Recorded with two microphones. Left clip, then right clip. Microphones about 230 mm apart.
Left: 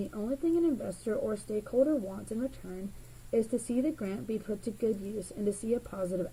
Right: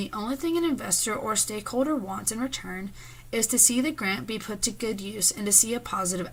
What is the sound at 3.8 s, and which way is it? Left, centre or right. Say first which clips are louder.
Speech: right 6 dB; right.